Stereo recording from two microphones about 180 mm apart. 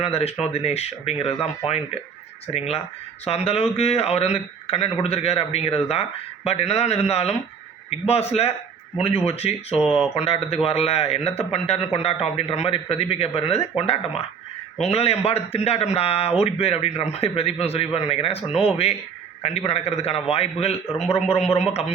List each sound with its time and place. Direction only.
0.0 s a man's voice: 35° left (ahead or behind)